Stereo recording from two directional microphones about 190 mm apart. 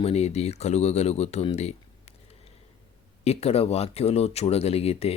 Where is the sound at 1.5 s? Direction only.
35° left (ahead or behind).